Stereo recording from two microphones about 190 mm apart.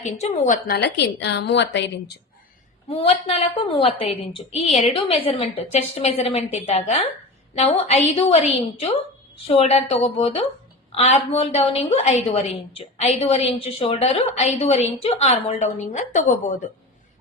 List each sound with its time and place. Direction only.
0.0 s a woman's voice: 40° left (ahead or behind)
0.9 s a woman's voice: 60° left (ahead or behind)
2.9 s a woman's voice: 30° left (ahead or behind)